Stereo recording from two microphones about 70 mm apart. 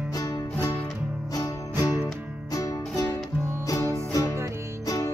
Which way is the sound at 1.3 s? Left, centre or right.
Left.